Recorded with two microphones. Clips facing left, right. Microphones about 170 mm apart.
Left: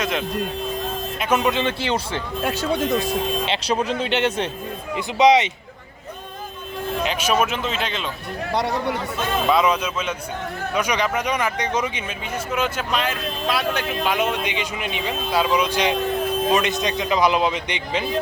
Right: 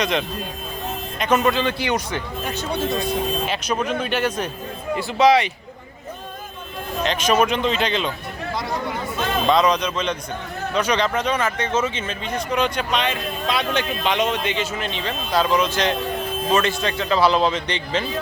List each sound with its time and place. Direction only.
0.0 s a man's voice: centre (ahead or behind); by 2.2 s 25° left (ahead or behind)
2.4 s speech: 90° left
3.4 s a man's voice: 30° left (ahead or behind)
7.0 s a man's voice: 10° left (ahead or behind)
8.5 s speech: 70° left (ahead or behind)
9.5 s speech: 5° left (ahead or behind)